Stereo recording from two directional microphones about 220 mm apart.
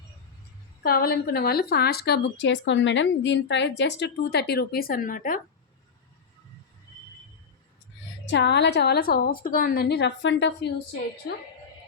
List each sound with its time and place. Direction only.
0.8 s a woman's voice: 45° left (ahead or behind)
8.2 s a woman's voice: 55° left (ahead or behind)